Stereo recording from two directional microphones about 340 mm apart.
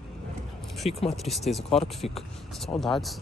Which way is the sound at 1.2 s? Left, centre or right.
Centre.